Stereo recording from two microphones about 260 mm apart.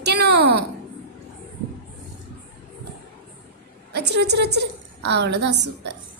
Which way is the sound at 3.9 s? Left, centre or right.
Right.